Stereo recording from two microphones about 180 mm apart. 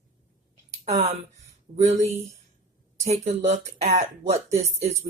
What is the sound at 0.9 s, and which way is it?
Speech, 40° right (ahead or behind).